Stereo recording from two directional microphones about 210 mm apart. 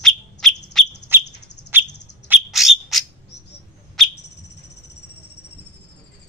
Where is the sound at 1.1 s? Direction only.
10° right (ahead or behind).